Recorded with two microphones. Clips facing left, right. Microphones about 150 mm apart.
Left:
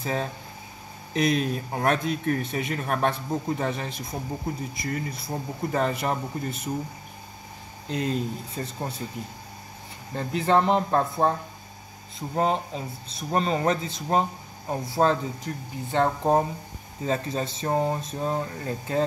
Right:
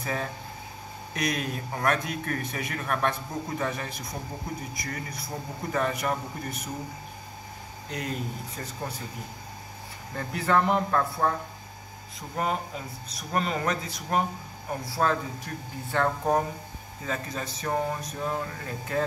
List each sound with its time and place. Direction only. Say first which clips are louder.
0.0 s speech: left 3 dB; 30° left (ahead or behind)
5.7 s speech: left 2 dB; 30° left (ahead or behind)
7.9 s speech: left 6 dB; 30° left (ahead or behind)
10.1 s speech: left 3 dB; 25° left (ahead or behind)
12.4 s speech: left 5 dB; 30° left (ahead or behind)